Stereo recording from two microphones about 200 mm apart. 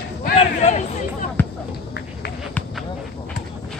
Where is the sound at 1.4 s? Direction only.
10° left (ahead or behind).